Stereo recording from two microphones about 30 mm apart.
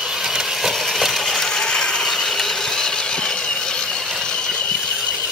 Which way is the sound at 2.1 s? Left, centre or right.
Centre.